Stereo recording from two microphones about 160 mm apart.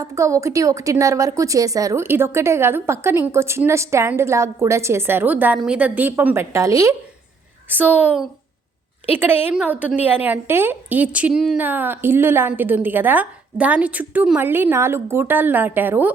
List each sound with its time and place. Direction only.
0.0 s a woman's voice: 20° right (ahead or behind)